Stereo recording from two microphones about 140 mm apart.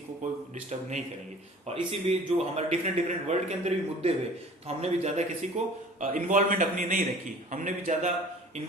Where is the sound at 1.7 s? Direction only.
45° right (ahead or behind).